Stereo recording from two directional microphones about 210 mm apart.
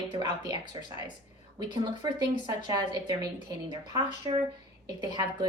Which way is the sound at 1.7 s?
20° right (ahead or behind).